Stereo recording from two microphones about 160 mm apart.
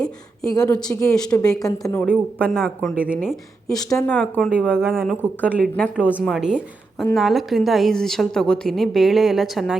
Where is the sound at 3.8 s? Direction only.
20° left (ahead or behind).